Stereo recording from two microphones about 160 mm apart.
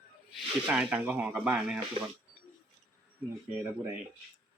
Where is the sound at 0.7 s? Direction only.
5° right (ahead or behind).